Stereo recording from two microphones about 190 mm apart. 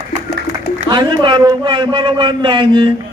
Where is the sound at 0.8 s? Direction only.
25° right (ahead or behind).